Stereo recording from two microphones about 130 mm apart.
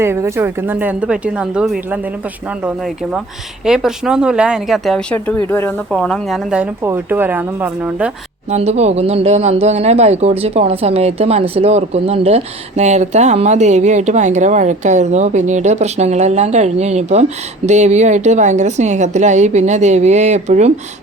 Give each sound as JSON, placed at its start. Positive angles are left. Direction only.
{"t": 0.0, "sound": "speech", "side_deg": -20}
{"t": 5.1, "sound": "speech", "side_deg": 10}
{"t": 6.8, "sound": "speech", "side_deg": -15}
{"t": 8.4, "sound": "speech", "side_deg": -55}